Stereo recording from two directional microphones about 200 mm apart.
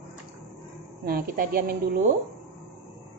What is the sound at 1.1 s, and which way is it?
Speech, 45° right (ahead or behind).